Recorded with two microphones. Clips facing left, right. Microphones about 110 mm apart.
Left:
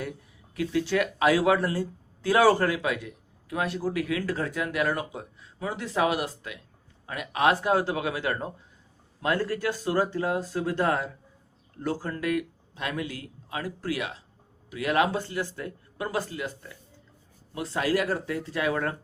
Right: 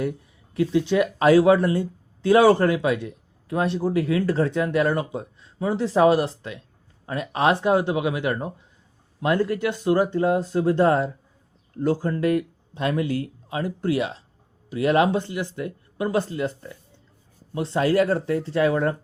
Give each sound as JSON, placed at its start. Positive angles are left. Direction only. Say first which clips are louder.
{"t": 0.5, "sound": "speech", "louder": "right 5 dB", "side_deg": -25}
{"t": 18.7, "sound": "speech", "louder": "right 6 dB", "side_deg": -20}